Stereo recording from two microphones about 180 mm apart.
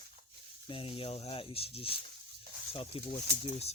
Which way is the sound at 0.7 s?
30° left (ahead or behind).